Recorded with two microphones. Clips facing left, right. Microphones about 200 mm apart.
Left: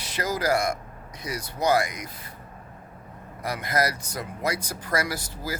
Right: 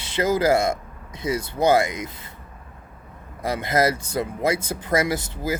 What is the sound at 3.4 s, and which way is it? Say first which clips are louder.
Speech: right 5 dB; 25° right (ahead or behind).